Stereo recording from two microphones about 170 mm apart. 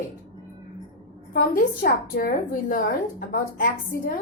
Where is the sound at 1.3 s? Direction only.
55° left (ahead or behind).